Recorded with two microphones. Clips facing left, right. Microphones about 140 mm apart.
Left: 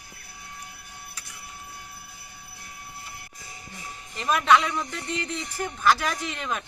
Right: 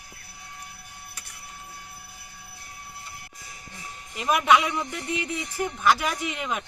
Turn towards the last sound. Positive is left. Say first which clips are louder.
# right 1 dB
turn(degrees=-15)  # may be behind; listen again after turning